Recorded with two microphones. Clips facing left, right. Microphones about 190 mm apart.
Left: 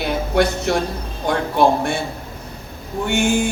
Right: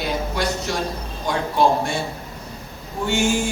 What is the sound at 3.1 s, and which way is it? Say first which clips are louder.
Speech: left 2 dB; 60° left (ahead or behind).